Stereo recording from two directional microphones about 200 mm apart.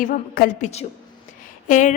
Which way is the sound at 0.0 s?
45° left (ahead or behind).